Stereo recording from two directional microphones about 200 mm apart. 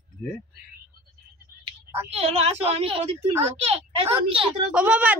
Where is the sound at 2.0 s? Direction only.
30° right (ahead or behind).